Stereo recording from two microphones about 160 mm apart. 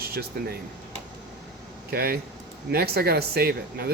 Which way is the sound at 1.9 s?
75° right (ahead or behind).